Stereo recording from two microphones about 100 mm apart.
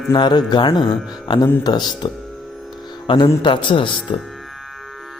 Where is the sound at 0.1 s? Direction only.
45° left (ahead or behind).